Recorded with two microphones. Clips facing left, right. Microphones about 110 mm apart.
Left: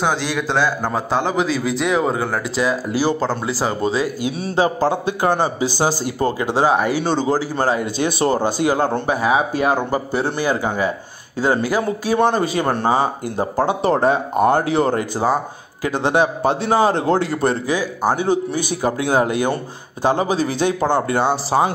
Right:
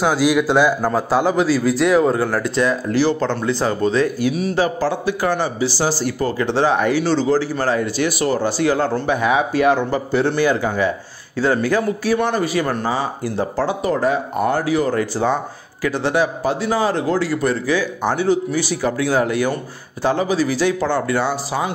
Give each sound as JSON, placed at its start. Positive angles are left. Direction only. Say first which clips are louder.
{"t": 0.0, "sound": "a man's voice", "louder": "right 4 dB", "side_deg": -5}
{"t": 4.3, "sound": "a man's voice", "louder": "even", "side_deg": 30}
{"t": 9.0, "sound": "speech", "louder": "even", "side_deg": 35}
{"t": 11.3, "sound": "a man's voice", "louder": "right 1 dB", "side_deg": 15}